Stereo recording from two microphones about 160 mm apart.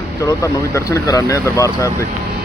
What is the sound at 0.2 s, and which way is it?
Speech, 20° left (ahead or behind).